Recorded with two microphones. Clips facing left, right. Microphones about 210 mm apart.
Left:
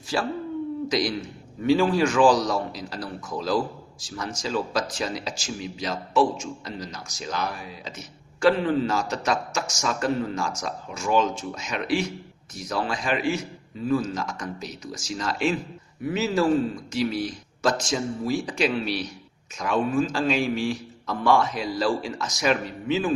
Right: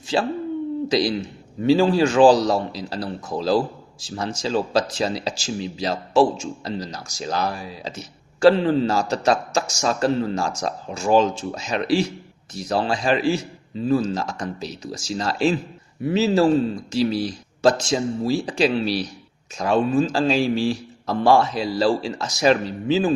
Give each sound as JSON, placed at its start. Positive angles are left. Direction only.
{"t": 0.1, "sound": "speech", "side_deg": -25}